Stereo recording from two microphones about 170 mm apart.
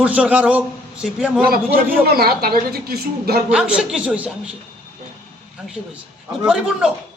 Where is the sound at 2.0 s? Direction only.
65° right (ahead or behind).